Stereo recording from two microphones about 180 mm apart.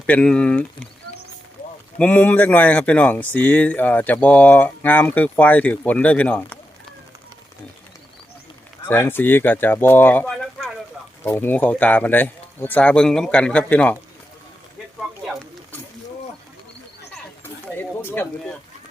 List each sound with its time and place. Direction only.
0.0 s speech: 5° left (ahead or behind)
2.0 s speech: 10° left (ahead or behind)
8.9 s speech: 10° left (ahead or behind)
17.4 s a sound: 10° left (ahead or behind)